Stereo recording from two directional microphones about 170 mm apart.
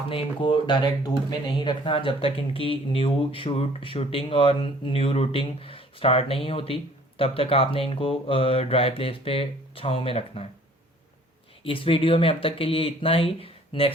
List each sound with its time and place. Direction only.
0.1 s speech: 30° left (ahead or behind)
11.6 s speech: 30° left (ahead or behind)